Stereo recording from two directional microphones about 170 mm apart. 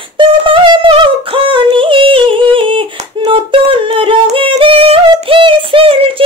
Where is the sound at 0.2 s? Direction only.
30° right (ahead or behind).